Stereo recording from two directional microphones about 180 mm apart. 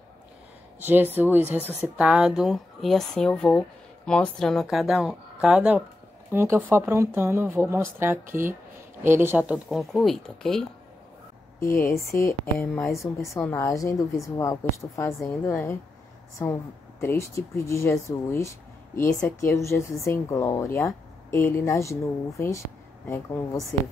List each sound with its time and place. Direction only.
0.7 s speech: 10° right (ahead or behind)
11.6 s speech: 15° left (ahead or behind)
17.0 s speech: 15° left (ahead or behind)